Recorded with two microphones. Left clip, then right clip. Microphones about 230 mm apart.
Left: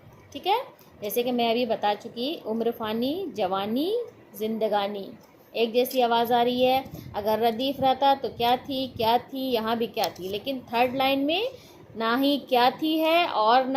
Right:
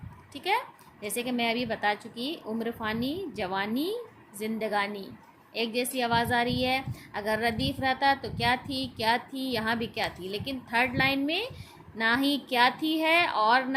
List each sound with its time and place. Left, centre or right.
1.0 s a child's voice: centre